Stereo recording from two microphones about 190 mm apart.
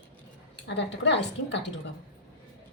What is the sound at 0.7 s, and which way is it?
Speech, 65° left (ahead or behind).